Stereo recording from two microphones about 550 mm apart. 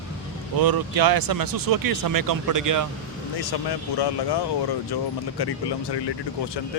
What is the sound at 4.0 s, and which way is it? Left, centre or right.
Speech, left.